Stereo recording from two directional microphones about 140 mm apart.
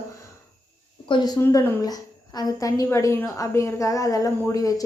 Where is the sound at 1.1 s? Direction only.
30° left (ahead or behind).